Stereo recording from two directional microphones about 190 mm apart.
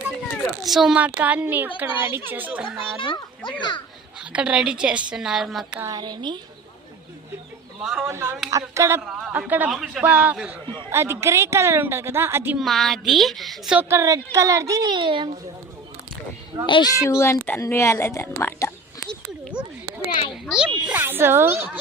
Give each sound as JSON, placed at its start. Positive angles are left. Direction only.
{"t": 0.6, "sound": "a woman's voice", "side_deg": 0}
{"t": 3.0, "sound": "a child's voice", "side_deg": 25}
{"t": 4.2, "sound": "a woman's voice", "side_deg": -5}
{"t": 5.8, "sound": "a child's voice", "side_deg": -20}
{"t": 7.8, "sound": "speech", "side_deg": -5}
{"t": 8.0, "sound": "a woman's voice", "side_deg": -15}
{"t": 9.0, "sound": "a woman's voice", "side_deg": -5}
{"t": 12.6, "sound": "a woman's voice", "side_deg": 0}
{"t": 16.6, "sound": "speech", "side_deg": 25}
{"t": 20.8, "sound": "a woman's voice", "side_deg": -10}